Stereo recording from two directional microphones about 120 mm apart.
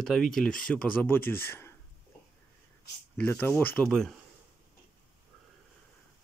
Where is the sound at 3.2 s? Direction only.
15° left (ahead or behind).